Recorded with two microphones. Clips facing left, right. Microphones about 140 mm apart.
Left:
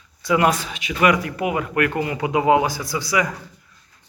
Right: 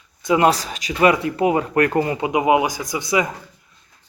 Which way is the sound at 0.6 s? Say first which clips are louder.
Right 2 dB; 40° right (ahead or behind).